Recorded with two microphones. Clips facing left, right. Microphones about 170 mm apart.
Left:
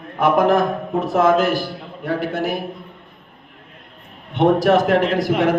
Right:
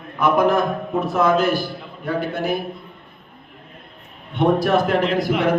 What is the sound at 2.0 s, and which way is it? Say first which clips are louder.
Speech: left 1 dB; 90° left.